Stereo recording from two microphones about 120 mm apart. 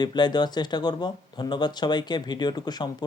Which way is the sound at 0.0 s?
35° left (ahead or behind).